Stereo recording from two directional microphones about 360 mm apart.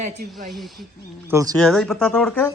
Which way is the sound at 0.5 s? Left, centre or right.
Centre.